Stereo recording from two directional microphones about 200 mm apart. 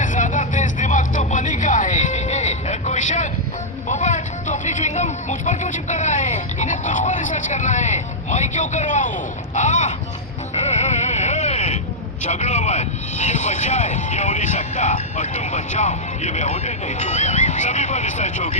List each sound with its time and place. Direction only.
0.0 s vehicle: 40° left (ahead or behind)
10.5 s music: 35° left (ahead or behind)
12.2 s speech: 35° left (ahead or behind)